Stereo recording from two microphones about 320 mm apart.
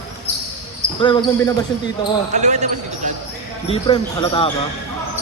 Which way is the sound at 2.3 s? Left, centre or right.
Right.